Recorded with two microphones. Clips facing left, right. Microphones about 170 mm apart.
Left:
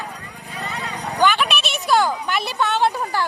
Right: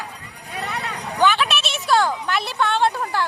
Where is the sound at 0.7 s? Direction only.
70° right (ahead or behind).